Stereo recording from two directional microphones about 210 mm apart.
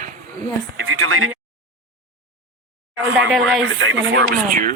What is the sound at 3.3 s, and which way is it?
Speech, centre (ahead or behind).